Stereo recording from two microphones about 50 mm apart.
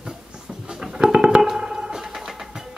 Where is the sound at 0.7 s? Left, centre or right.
Centre.